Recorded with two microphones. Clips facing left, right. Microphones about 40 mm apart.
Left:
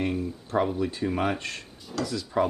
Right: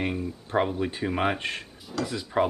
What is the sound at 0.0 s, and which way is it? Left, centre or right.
Speech, right.